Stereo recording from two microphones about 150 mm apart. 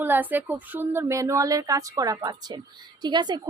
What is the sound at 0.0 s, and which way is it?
A woman's voice, 10° right (ahead or behind).